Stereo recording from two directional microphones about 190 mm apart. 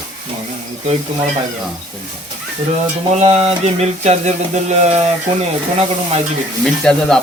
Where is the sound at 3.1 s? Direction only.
35° right (ahead or behind).